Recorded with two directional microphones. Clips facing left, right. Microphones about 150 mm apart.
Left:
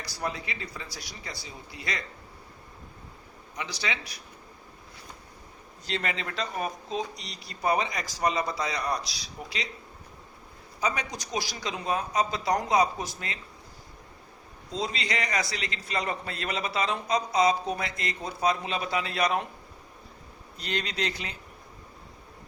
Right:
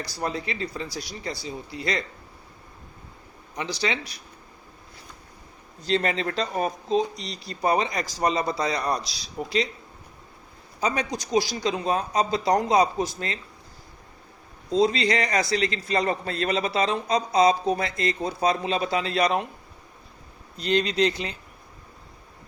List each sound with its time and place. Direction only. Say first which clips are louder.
0.0 s a man's voice: right 4 dB; 30° right (ahead or behind)
3.6 s a man's voice: right 6 dB; 30° right (ahead or behind)
5.8 s a man's voice: right 8 dB; 35° right (ahead or behind)
10.8 s a man's voice: right 4 dB; 35° right (ahead or behind)
14.7 s a man's voice: right 10 dB; 35° right (ahead or behind)
20.6 s speech: right 10 dB; 25° right (ahead or behind)